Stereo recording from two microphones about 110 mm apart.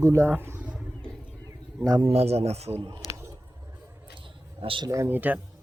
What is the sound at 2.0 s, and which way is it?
Speech, 70° right (ahead or behind).